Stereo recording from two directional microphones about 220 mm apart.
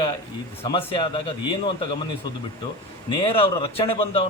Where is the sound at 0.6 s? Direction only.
25° left (ahead or behind).